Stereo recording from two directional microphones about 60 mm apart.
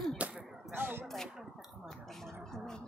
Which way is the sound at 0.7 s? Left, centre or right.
Right.